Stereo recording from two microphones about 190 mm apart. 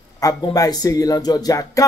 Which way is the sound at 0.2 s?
20° left (ahead or behind).